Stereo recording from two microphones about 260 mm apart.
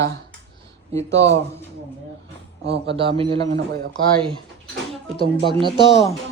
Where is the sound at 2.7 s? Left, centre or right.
Right.